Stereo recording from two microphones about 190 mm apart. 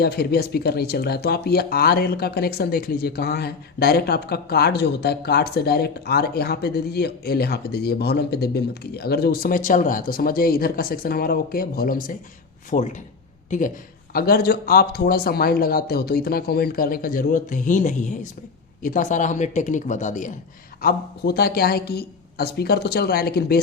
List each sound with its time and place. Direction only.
0.0 s speech: 55° left (ahead or behind); by 20.3 s 40° left (ahead or behind)
20.8 s speech: 55° left (ahead or behind)